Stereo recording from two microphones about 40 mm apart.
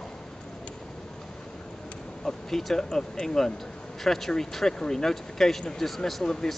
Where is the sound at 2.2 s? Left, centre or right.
Centre.